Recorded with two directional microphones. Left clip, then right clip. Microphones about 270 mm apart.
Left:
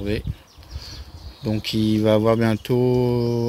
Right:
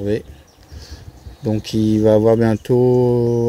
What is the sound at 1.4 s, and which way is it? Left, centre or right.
Speech, centre.